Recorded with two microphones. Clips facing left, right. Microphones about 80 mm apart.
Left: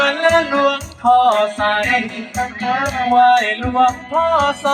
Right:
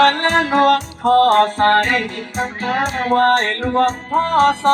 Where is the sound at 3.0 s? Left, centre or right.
Right.